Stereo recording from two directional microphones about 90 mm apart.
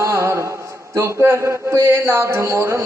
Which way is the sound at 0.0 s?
30° right (ahead or behind).